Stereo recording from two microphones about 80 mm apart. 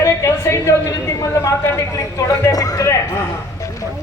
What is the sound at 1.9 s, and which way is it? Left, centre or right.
Speech, left.